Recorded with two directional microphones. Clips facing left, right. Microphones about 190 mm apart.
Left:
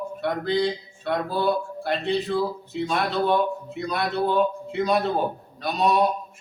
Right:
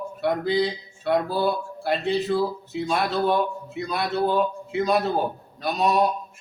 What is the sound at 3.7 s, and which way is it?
A man's voice, centre (ahead or behind).